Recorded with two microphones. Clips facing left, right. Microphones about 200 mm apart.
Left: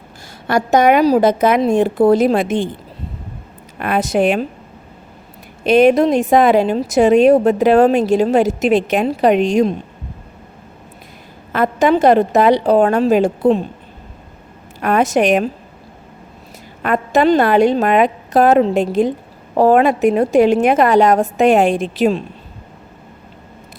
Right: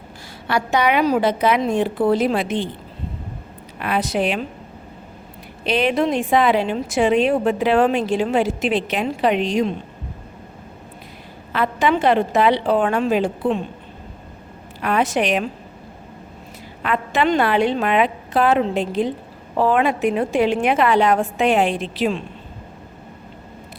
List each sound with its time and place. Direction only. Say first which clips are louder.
0.4 s a woman's voice: left 6 dB; 45° left (ahead or behind)
3.8 s a woman's voice: left 5 dB; 50° left (ahead or behind)
5.6 s a woman's voice: left 8 dB; 45° left (ahead or behind)
11.5 s a woman's voice: left 5 dB; 45° left (ahead or behind)
14.8 s a woman's voice: left 5 dB; 45° left (ahead or behind)
16.8 s a woman's voice: left 6 dB; 45° left (ahead or behind)